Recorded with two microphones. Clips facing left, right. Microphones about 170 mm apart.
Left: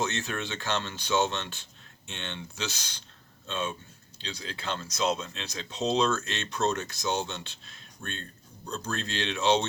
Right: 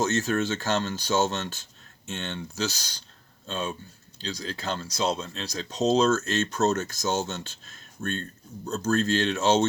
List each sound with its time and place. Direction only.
0.0 s speech: 40° right (ahead or behind)